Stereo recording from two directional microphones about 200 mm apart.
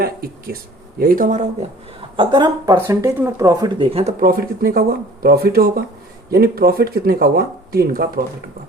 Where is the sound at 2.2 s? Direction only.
20° right (ahead or behind).